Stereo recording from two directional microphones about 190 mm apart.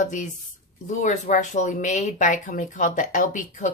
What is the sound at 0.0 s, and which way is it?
Speech, 40° left (ahead or behind).